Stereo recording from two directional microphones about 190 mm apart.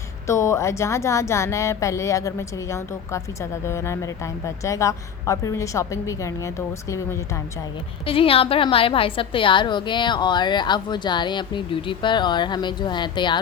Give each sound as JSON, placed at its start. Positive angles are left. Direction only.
{"t": 0.3, "sound": "speech", "side_deg": 15}
{"t": 8.0, "sound": "a woman's voice", "side_deg": 30}